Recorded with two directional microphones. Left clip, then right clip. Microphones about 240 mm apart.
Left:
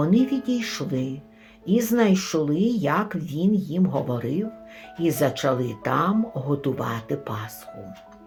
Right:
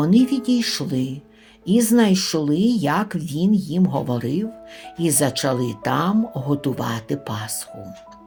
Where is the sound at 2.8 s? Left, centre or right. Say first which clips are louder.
Right 2 dB; right.